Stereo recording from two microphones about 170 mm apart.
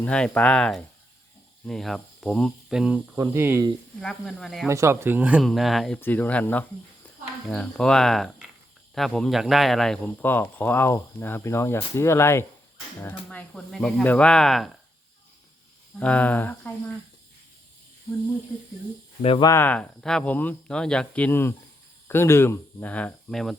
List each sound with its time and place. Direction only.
0.0 s speech: 10° left (ahead or behind); by 3.7 s 15° right (ahead or behind)
4.0 s speech: 5° left (ahead or behind)
4.7 s speech: 15° right (ahead or behind); by 14.7 s centre (ahead or behind)
16.0 s speech: 10° left (ahead or behind)
19.2 s speech: 35° left (ahead or behind)
19.5 s speech: 10° left (ahead or behind)